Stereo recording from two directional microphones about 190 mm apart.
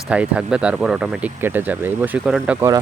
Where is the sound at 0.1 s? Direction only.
5° right (ahead or behind).